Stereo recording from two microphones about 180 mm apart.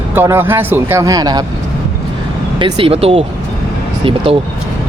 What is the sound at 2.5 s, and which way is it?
Speech, 30° right (ahead or behind).